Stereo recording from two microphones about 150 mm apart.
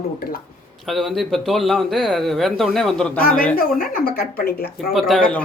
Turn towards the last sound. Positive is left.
turn(degrees=5)  # may be behind; listen again after turning